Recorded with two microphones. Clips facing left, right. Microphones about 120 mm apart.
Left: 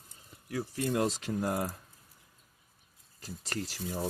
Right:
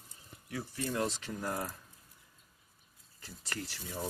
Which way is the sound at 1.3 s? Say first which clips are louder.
Left 6 dB; 40° left (ahead or behind).